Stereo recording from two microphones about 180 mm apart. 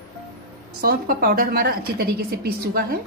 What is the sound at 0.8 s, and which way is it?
A woman's voice, 55° right (ahead or behind).